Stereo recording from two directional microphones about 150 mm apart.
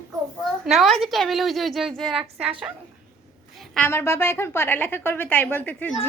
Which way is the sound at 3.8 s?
20° left (ahead or behind).